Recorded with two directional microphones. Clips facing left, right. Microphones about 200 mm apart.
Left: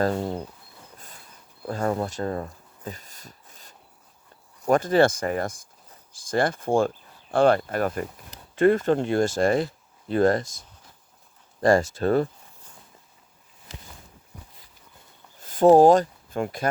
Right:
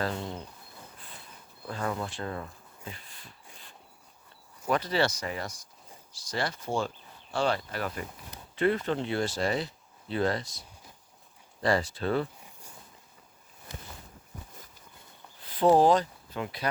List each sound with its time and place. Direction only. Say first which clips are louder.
0.0 s speech: left 8 dB; 40° left (ahead or behind)
1.6 s speech: left 7 dB; 45° left (ahead or behind)
3.5 s cricket: left 1 dB; 40° left (ahead or behind)
4.6 s speech: left 8 dB; 45° left (ahead or behind)
11.6 s speech: left 8 dB; 45° left (ahead or behind)
15.4 s speech: left 7 dB; 45° left (ahead or behind)